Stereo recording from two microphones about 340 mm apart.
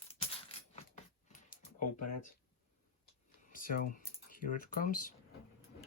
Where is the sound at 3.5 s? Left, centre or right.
Left.